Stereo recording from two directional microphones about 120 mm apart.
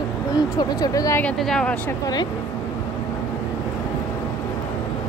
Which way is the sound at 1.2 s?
5° left (ahead or behind).